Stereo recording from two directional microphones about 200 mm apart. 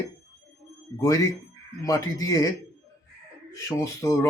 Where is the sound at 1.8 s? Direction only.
15° left (ahead or behind).